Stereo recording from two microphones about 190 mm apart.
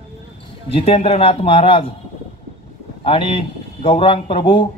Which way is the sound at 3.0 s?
30° left (ahead or behind).